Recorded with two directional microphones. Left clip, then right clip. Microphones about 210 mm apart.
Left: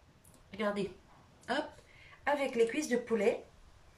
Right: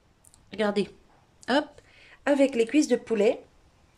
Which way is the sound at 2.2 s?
50° right (ahead or behind).